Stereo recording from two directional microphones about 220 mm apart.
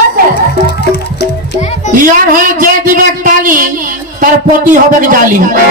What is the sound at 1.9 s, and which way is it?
A woman's voice, 40° right (ahead or behind).